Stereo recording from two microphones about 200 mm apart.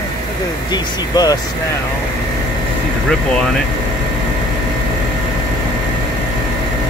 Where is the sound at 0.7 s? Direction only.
20° left (ahead or behind).